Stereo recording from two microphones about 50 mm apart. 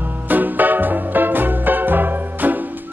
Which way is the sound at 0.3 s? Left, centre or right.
Right.